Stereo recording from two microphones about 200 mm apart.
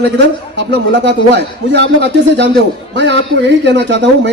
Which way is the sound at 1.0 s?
60° right (ahead or behind).